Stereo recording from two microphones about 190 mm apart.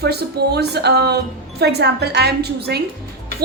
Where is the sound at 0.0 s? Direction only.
60° right (ahead or behind).